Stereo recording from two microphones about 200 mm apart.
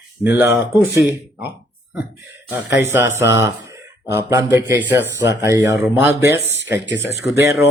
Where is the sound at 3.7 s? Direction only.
15° right (ahead or behind).